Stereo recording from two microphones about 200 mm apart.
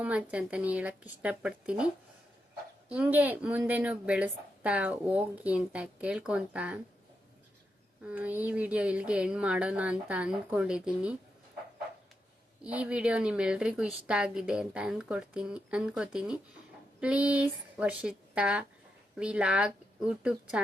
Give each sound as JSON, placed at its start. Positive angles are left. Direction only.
{"t": 0.0, "sound": "a woman's voice", "side_deg": -5}
{"t": 2.9, "sound": "a woman's voice", "side_deg": -5}
{"t": 8.0, "sound": "a woman's voice", "side_deg": -10}
{"t": 12.6, "sound": "a woman's voice", "side_deg": -5}